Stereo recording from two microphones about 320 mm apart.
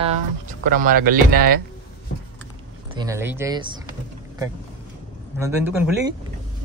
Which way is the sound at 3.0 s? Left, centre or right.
Centre.